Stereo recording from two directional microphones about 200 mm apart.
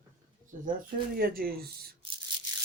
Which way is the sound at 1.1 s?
45° right (ahead or behind).